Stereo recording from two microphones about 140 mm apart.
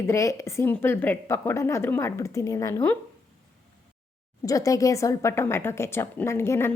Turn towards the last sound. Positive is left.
turn(degrees=20)  # may be behind; listen again after turning